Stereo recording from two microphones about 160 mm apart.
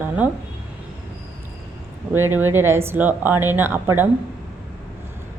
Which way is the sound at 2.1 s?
15° right (ahead or behind).